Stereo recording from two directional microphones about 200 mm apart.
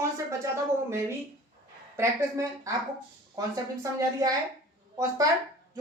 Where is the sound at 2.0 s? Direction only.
15° right (ahead or behind).